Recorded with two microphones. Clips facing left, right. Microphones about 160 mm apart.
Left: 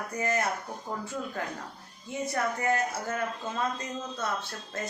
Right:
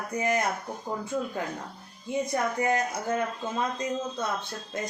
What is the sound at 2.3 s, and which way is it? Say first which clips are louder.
Speech: right 1 dB; 20° right (ahead or behind).